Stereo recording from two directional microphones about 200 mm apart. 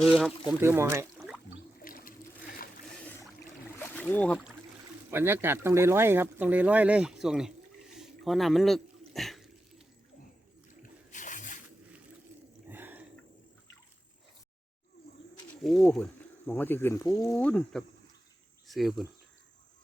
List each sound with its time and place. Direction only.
0.0 s speech: centre (ahead or behind)
0.6 s speech: 10° right (ahead or behind)
1.8 s water: 45° left (ahead or behind)
2.9 s boat: 10° left (ahead or behind)
4.1 s speech: 5° left (ahead or behind)
5.1 s speech: 10° right (ahead or behind)
7.9 s a sound: centre (ahead or behind)
11.1 s squish: 40° left (ahead or behind)
12.6 s a sound: 10° right (ahead or behind)
15.6 s speech: centre (ahead or behind)
17.3 s speech: 5° left (ahead or behind)